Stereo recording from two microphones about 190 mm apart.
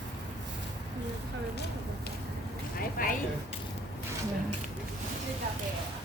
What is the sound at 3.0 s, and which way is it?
Speech, 45° left (ahead or behind).